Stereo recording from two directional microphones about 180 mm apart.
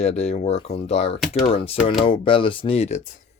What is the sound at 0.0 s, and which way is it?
Speech, 40° left (ahead or behind).